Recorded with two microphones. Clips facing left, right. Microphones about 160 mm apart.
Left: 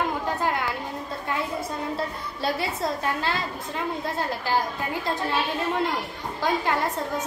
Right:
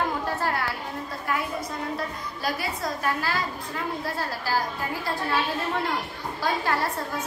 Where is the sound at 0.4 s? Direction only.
20° left (ahead or behind).